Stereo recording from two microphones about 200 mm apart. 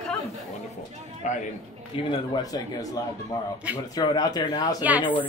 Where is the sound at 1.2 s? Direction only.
40° left (ahead or behind).